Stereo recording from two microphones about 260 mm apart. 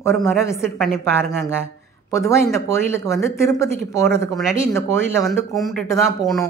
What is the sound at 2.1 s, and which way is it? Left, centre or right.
Speech, centre.